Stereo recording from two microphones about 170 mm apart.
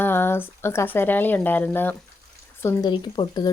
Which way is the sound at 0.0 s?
10° left (ahead or behind).